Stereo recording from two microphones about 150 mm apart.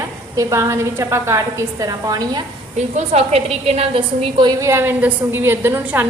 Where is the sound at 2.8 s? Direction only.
45° right (ahead or behind).